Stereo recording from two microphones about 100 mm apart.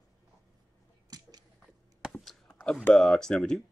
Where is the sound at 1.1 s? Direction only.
40° right (ahead or behind).